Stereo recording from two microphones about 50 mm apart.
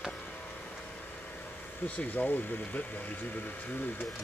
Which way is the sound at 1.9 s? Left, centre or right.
Left.